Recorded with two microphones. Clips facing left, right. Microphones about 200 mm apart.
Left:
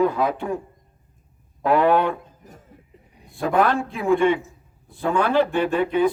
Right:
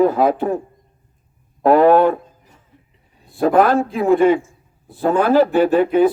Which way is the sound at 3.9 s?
35° right (ahead or behind).